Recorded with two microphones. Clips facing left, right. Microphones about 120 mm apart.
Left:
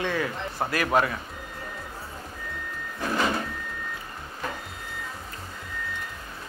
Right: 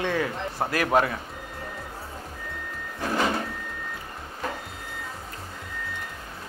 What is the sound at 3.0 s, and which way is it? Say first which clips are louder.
Sliding door: right 1 dB; 40° right (ahead or behind).